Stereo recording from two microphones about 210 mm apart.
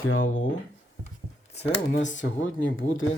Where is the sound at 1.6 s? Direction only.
35° left (ahead or behind).